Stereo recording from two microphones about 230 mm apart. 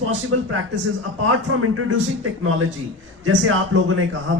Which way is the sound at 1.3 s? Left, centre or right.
Right.